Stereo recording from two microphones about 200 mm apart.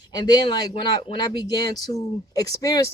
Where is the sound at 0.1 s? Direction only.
20° left (ahead or behind).